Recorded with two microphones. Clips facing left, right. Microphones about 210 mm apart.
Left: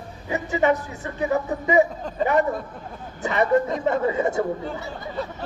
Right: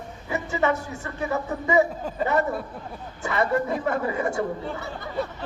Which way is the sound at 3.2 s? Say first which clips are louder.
Left 4 dB; 20° left (ahead or behind).